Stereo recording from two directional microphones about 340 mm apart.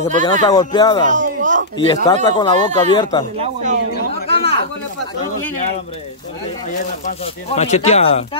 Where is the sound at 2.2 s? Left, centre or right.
Centre.